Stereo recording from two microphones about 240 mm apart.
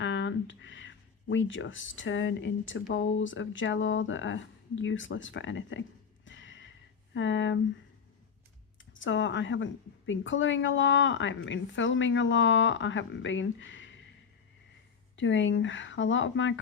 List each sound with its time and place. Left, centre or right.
0.0 s a woman's voice: left
6.2 s a sound: left
7.1 s a woman's voice: left
8.9 s a woman's voice: left
15.1 s a woman's voice: left